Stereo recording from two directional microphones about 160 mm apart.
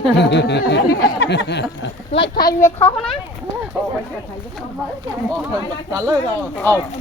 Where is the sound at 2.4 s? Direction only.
20° left (ahead or behind).